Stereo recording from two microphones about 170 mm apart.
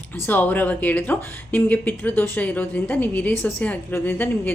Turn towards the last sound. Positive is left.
turn(degrees=10)  # may be behind; listen again after turning